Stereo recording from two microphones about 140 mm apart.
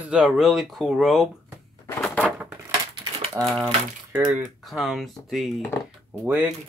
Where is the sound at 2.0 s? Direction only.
5° left (ahead or behind).